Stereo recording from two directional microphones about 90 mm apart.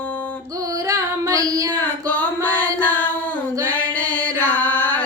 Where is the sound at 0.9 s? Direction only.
40° right (ahead or behind).